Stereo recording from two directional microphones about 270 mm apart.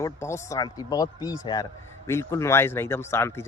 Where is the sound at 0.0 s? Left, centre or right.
Centre.